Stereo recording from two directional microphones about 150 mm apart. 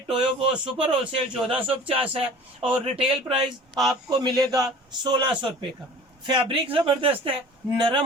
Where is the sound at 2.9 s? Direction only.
30° right (ahead or behind).